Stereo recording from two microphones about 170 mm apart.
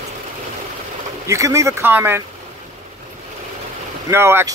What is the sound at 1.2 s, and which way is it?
Speech, 15° right (ahead or behind).